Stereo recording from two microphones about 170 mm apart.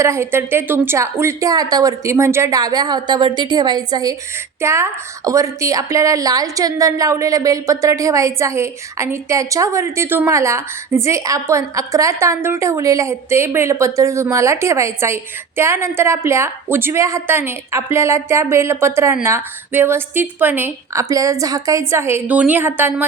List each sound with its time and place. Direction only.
0.0 s a woman's voice: 15° right (ahead or behind)